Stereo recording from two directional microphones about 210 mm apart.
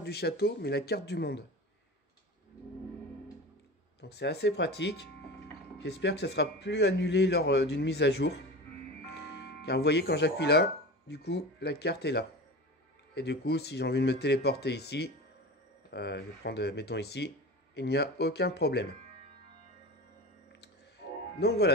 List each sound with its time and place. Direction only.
0.0 s speech: 50° left (ahead or behind)
4.0 s a man's voice: 50° left (ahead or behind)
21.4 s speech: 50° left (ahead or behind)